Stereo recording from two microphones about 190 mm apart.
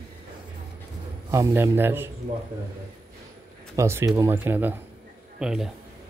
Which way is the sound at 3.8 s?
15° right (ahead or behind).